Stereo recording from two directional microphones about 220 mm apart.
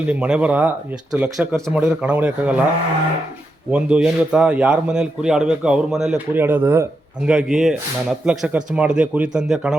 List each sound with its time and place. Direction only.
0.1 s a man's voice: 5° right (ahead or behind)
3.7 s a man's voice: 5° right (ahead or behind)